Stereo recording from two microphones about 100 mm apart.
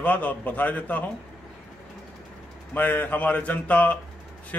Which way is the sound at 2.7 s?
15° left (ahead or behind).